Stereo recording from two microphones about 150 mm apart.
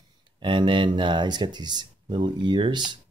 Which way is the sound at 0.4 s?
35° right (ahead or behind).